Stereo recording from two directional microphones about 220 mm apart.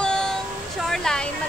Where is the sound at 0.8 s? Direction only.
Centre (ahead or behind).